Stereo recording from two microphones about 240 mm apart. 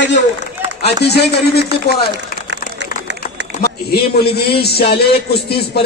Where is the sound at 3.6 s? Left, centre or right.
Left.